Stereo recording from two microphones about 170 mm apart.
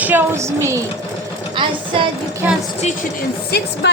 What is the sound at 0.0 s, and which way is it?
Speech, 10° right (ahead or behind).